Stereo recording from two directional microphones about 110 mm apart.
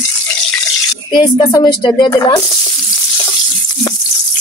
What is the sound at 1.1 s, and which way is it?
Speech, 45° left (ahead or behind).